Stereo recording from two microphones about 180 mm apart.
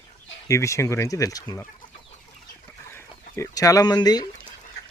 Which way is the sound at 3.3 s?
20° left (ahead or behind).